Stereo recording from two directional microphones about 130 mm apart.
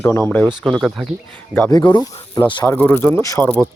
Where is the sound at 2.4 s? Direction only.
10° left (ahead or behind).